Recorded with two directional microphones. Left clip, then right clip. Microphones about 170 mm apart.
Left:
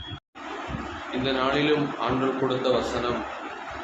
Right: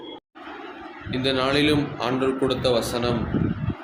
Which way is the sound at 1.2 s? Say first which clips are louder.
Right 3 dB; 60° right (ahead or behind).